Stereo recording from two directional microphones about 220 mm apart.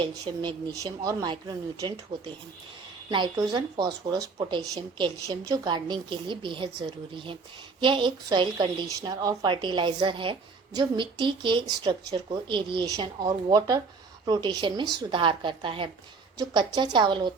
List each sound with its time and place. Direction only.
0.0 s speech: 20° right (ahead or behind)